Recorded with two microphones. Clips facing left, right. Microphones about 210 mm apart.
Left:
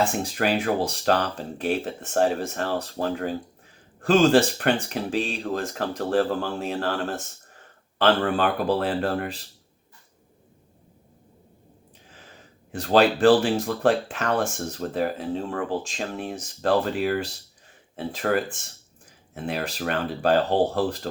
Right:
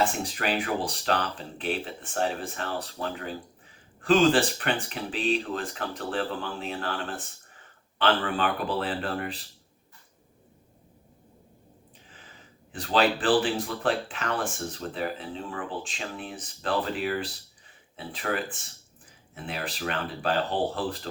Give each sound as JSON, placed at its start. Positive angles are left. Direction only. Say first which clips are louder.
{"t": 0.3, "sound": "speech", "louder": "left 6 dB", "side_deg": 45}
{"t": 12.7, "sound": "speech", "louder": "left 5 dB", "side_deg": 45}